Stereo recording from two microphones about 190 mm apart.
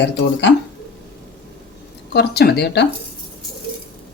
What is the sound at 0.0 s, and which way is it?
Speech, 65° left (ahead or behind).